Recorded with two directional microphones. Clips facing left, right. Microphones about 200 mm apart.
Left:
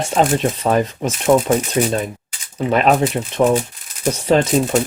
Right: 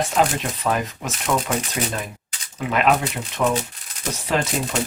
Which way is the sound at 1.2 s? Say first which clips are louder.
Left 9 dB; 30° left (ahead or behind).